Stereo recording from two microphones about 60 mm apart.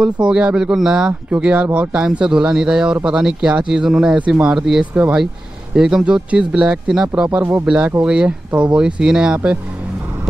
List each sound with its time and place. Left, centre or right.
0.0 s speech: centre
7.3 s speech: right
7.6 s speech: centre